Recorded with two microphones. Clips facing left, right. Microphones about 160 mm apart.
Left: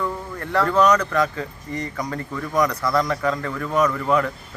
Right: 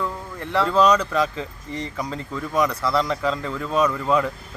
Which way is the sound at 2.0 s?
10° right (ahead or behind).